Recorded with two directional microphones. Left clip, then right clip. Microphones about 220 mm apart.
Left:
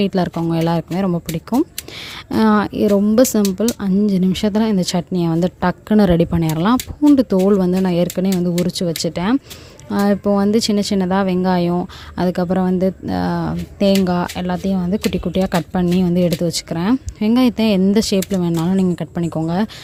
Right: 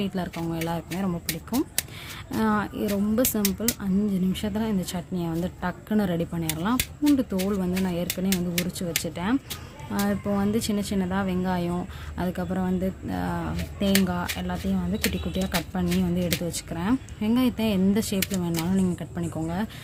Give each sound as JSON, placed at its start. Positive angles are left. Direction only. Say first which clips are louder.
{"t": 0.0, "sound": "a woman's voice", "louder": "left 12 dB", "side_deg": 50}